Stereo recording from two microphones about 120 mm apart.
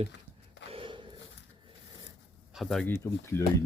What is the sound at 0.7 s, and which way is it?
Gasp, 45° right (ahead or behind).